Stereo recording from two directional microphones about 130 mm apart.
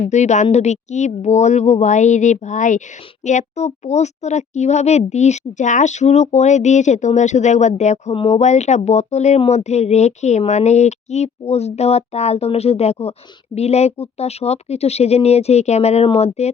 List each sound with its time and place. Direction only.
0.0 s speech: 65° left (ahead or behind)
3.2 s speech: 65° left (ahead or behind)